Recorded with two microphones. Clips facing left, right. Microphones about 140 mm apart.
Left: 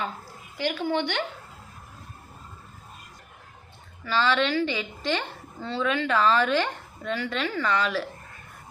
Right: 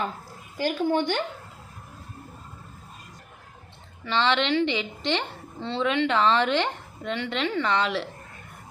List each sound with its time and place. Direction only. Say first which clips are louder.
0.5 s speech: right 2 dB; 45° right (ahead or behind)
4.0 s a woman's voice: even; 25° right (ahead or behind)